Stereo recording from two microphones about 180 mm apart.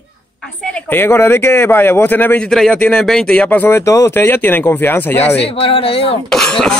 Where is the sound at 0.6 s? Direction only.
5° left (ahead or behind).